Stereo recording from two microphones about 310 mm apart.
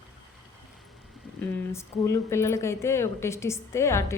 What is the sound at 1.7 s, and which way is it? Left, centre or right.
A woman's voice, centre.